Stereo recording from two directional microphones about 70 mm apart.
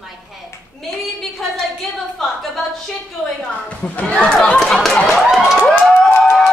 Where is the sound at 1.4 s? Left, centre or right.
Centre.